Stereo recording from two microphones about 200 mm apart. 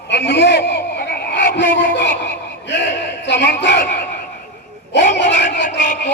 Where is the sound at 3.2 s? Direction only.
60° left (ahead or behind).